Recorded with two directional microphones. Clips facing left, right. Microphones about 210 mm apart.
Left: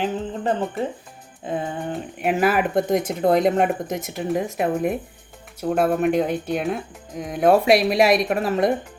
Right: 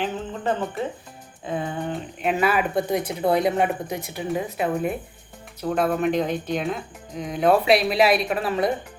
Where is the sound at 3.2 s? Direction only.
45° left (ahead or behind).